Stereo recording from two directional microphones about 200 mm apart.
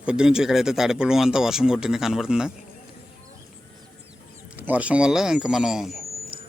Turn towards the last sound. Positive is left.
turn(degrees=0)  # may be behind; listen again after turning